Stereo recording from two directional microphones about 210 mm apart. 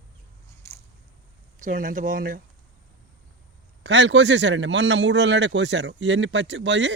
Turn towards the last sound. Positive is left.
turn(degrees=-60)  # may be behind; listen again after turning